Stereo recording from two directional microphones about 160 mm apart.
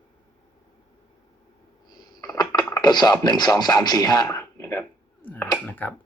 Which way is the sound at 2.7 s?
25° left (ahead or behind).